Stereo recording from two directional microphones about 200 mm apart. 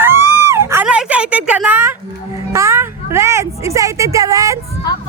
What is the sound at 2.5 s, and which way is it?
Speech, 15° right (ahead or behind).